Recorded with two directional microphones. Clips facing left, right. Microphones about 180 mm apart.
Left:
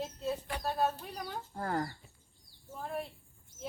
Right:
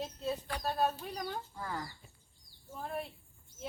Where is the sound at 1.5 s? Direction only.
50° left (ahead or behind).